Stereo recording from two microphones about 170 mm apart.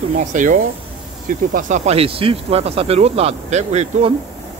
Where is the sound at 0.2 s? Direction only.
50° right (ahead or behind).